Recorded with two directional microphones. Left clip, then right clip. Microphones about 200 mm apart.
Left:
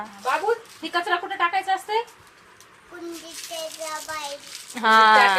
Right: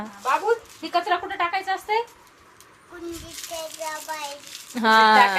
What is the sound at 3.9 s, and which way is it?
Speech, 15° right (ahead or behind).